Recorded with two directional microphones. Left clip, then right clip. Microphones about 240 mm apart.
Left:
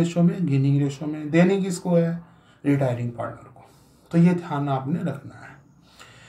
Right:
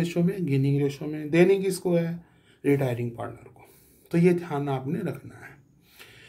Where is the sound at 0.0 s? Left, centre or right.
Right.